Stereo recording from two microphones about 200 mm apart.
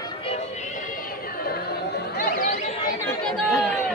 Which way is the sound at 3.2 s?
5° left (ahead or behind).